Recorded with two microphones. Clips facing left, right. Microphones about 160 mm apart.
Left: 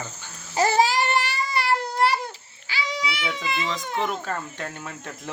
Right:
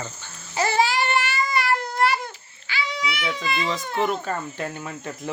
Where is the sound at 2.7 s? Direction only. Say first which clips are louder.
Right 1 dB; 35° left (ahead or behind).